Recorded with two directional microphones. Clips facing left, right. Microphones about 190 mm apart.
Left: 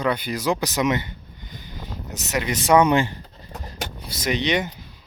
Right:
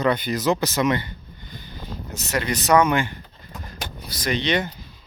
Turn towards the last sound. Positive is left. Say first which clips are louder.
# even
turn(degrees=15)  # may be behind; listen again after turning